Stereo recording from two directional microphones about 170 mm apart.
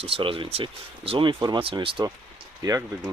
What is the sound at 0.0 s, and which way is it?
Speech, 35° right (ahead or behind).